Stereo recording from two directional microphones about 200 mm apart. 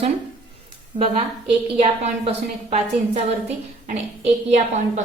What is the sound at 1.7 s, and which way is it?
A woman's voice, 30° right (ahead or behind).